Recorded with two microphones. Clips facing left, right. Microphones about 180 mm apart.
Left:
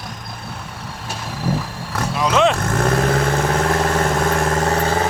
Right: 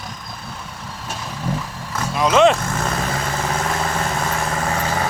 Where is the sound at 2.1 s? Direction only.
Centre (ahead or behind).